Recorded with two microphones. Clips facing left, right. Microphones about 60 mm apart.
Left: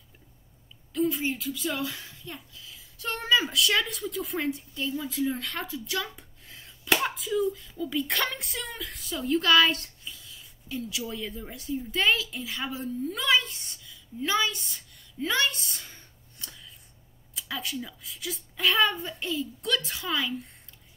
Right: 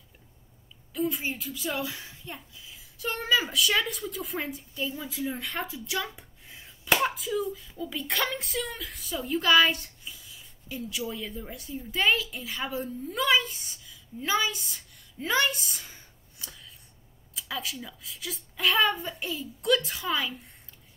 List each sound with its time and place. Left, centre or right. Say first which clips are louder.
0.9 s a woman's voice: left 3 dB; centre
3.0 s a woman's voice: left 1 dB; centre
5.4 s a woman's voice: even; centre